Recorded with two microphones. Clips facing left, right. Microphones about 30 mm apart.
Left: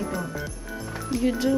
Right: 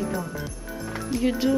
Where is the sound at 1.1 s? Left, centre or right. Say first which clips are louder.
Even; centre.